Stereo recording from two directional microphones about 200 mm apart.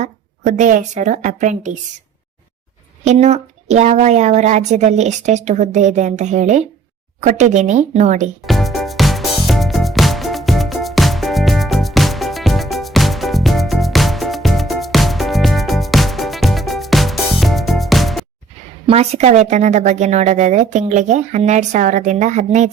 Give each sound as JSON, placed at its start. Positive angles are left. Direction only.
{"t": 0.0, "sound": "a woman's voice", "side_deg": -40}
{"t": 3.1, "sound": "a woman's voice", "side_deg": -35}
{"t": 8.4, "sound": "music", "side_deg": 0}
{"t": 18.9, "sound": "a woman's voice", "side_deg": -30}